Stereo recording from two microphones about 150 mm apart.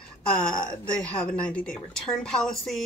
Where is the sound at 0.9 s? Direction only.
5° left (ahead or behind).